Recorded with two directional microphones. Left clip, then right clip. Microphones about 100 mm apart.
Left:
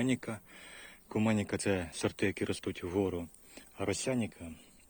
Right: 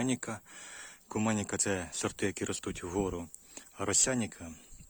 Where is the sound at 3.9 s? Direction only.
55° right (ahead or behind).